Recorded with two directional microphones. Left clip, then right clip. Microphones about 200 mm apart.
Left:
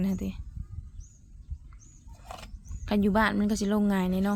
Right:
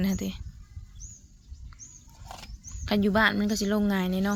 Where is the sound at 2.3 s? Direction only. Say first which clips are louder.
Right 1 dB; 5° left (ahead or behind).